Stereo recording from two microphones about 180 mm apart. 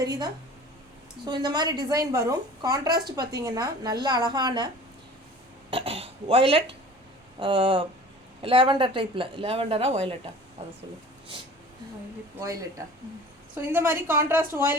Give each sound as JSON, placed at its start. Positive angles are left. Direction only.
{"t": 0.0, "sound": "a woman's voice", "side_deg": -20}
{"t": 5.7, "sound": "a woman's voice", "side_deg": -30}
{"t": 13.6, "sound": "a woman's voice", "side_deg": -10}